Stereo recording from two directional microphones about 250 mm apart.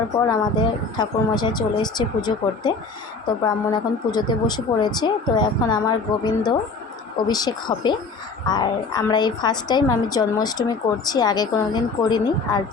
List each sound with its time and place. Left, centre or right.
0.3 s a woman's voice: centre